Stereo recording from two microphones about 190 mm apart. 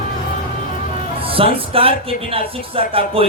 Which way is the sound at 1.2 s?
30° right (ahead or behind).